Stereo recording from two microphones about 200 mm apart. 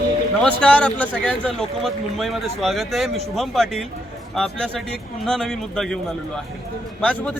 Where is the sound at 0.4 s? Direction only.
5° left (ahead or behind).